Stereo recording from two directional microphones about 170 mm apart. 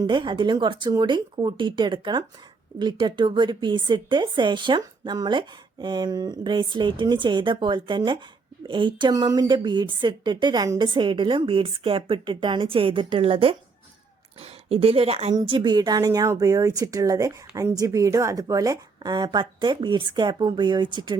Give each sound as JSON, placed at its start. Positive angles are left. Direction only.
{"t": 0.0, "sound": "a woman's voice", "side_deg": -25}